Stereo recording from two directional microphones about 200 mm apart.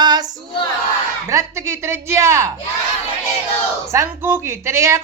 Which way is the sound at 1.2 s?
15° right (ahead or behind).